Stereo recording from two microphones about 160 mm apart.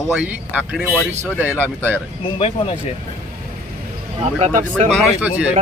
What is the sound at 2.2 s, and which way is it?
Speech, 35° left (ahead or behind).